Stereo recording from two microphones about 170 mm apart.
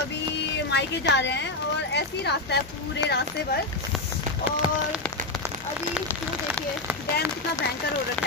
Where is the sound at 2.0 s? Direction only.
75° left (ahead or behind).